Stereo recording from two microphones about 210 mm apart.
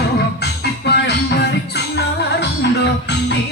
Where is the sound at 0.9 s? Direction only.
50° left (ahead or behind).